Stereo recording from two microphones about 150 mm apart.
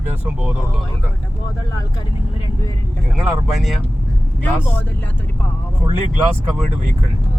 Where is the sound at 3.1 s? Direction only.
Centre (ahead or behind).